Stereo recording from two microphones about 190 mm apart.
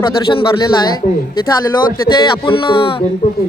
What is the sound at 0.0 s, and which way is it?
Speech, 25° left (ahead or behind).